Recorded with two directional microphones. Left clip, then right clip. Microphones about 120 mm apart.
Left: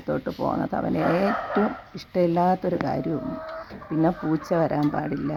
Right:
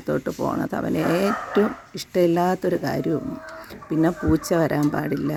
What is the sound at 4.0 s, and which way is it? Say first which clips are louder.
Speech: right 3 dB; 20° right (ahead or behind).